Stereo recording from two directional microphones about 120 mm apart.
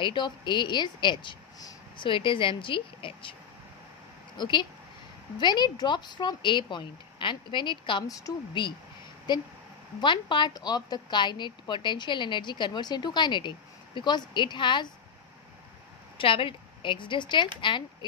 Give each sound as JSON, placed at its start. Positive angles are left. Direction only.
{"t": 0.0, "sound": "a woman's voice", "side_deg": 40}
{"t": 4.4, "sound": "a woman's voice", "side_deg": 40}
{"t": 8.3, "sound": "a woman's voice", "side_deg": 30}
{"t": 16.2, "sound": "a woman's voice", "side_deg": 45}